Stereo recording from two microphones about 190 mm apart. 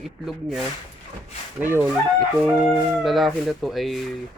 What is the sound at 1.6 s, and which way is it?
Speech, 10° right (ahead or behind).